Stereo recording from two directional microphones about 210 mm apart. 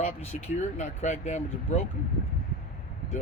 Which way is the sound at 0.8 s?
35° left (ahead or behind).